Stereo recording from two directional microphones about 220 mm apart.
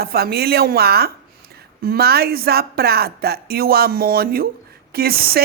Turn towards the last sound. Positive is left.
turn(degrees=-45)  # may be behind; listen again after turning